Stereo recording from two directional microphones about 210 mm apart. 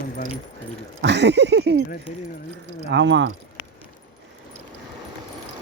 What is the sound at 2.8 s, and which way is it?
Speech, 60° right (ahead or behind).